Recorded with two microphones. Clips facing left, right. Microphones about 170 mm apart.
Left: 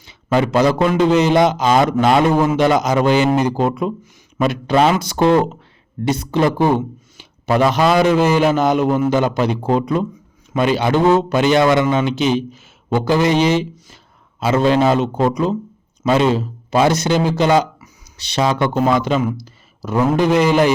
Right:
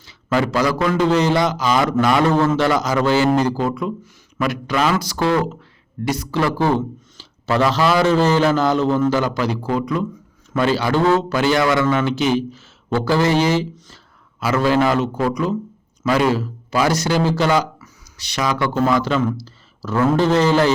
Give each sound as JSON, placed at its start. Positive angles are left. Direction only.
{"t": 0.0, "sound": "a man's voice", "side_deg": 20}
{"t": 2.3, "sound": "a man's voice", "side_deg": 15}